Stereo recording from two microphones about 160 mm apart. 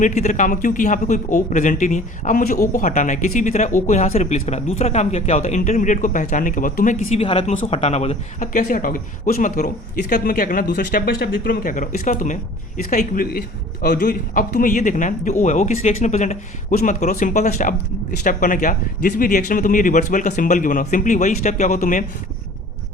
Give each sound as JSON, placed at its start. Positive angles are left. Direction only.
{"t": 0.0, "sound": "a man's voice", "side_deg": 50}